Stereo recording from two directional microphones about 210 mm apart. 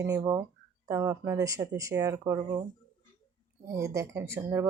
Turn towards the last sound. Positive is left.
turn(degrees=-10)  # may be behind; listen again after turning